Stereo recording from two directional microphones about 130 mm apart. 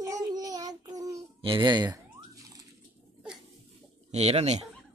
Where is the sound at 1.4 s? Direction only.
35° right (ahead or behind).